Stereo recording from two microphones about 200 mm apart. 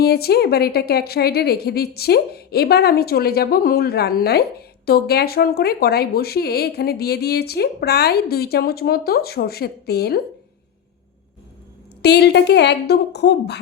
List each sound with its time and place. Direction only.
0.0 s a woman's voice: 50° left (ahead or behind)
12.0 s a woman's voice: 55° left (ahead or behind)